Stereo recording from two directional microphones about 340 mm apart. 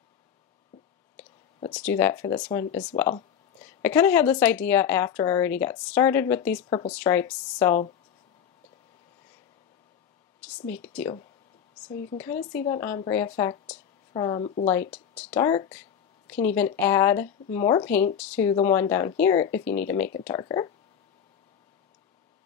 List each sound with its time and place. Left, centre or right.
1.1 s speech: centre
3.8 s a woman's voice: centre
10.6 s speech: left
10.9 s a woman's voice: centre
12.2 s speech: centre
14.7 s speech: centre